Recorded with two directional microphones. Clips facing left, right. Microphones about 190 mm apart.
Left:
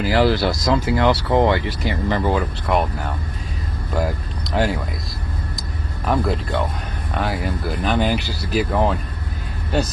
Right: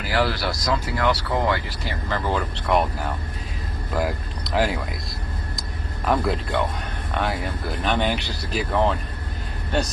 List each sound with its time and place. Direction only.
0.1 s speech: 25° left (ahead or behind)
2.6 s speech: centre (ahead or behind)
4.5 s speech: centre (ahead or behind)
6.1 s speech: centre (ahead or behind)